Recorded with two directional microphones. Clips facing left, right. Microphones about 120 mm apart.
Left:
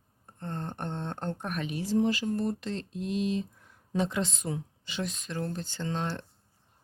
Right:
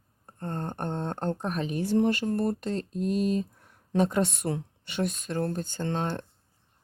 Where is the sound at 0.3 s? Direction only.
45° right (ahead or behind).